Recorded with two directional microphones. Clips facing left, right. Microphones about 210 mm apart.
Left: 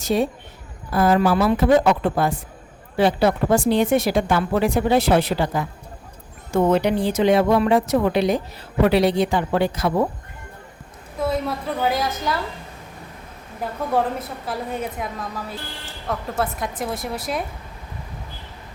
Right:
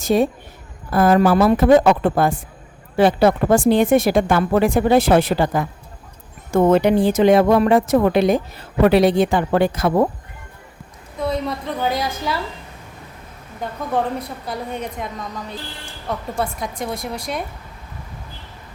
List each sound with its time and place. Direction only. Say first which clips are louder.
0.0 s a woman's voice: right 4 dB; 50° right (ahead or behind)
11.2 s a woman's voice: even; 5° left (ahead or behind)
13.6 s a woman's voice: even; 5° left (ahead or behind)